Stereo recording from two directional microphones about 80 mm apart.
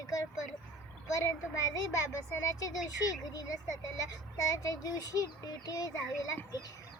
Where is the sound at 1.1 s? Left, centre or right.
Left.